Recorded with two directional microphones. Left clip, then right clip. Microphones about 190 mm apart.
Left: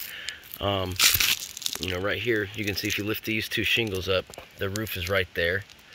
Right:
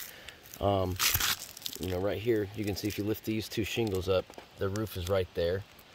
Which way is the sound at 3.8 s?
20° left (ahead or behind).